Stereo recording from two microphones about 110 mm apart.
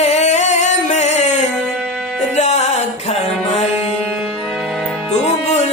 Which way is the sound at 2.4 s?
90° left.